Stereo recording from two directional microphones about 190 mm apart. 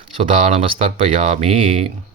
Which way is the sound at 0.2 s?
30° right (ahead or behind).